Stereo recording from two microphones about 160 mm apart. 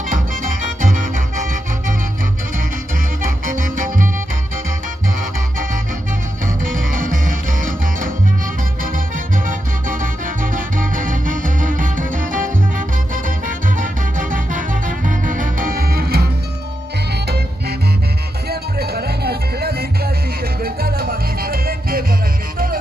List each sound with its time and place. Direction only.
0.1 s music: 55° right (ahead or behind)
3.2 s music: 60° right (ahead or behind)
6.4 s music: 60° right (ahead or behind); by 16.3 s 75° right (ahead or behind)
17.1 s music: 90° right; by 22.0 s 65° right (ahead or behind)